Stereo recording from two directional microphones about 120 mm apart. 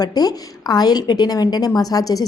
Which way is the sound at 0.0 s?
30° left (ahead or behind).